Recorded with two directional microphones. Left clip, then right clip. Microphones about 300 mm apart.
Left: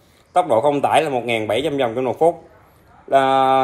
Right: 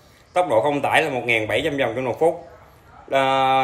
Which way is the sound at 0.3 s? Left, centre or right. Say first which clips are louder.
Left 3 dB; centre.